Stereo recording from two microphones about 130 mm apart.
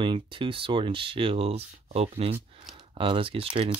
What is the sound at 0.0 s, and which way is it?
Speech, 40° right (ahead or behind).